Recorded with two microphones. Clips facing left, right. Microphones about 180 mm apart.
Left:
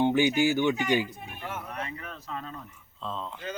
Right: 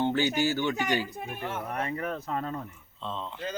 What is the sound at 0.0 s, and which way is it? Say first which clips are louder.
Speech: left 3 dB; 15° left (ahead or behind).